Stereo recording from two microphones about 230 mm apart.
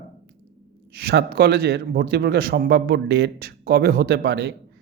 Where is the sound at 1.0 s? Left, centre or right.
Right.